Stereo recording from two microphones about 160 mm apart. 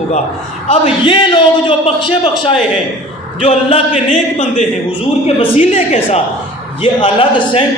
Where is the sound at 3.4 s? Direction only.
35° left (ahead or behind).